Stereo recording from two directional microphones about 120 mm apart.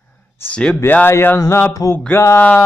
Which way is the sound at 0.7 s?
15° left (ahead or behind).